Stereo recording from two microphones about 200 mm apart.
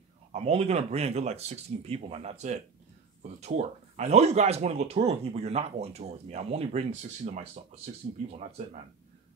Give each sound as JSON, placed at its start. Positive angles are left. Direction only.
{"t": 0.3, "sound": "speech", "side_deg": -30}